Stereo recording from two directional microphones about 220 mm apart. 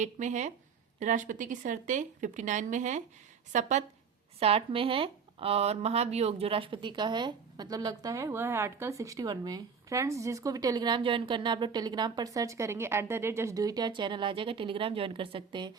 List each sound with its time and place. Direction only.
0.0 s speech: 35° right (ahead or behind)